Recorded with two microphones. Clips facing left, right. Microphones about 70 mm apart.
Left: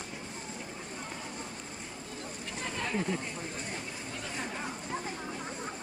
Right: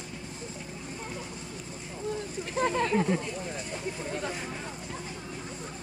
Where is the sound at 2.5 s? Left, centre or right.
Right.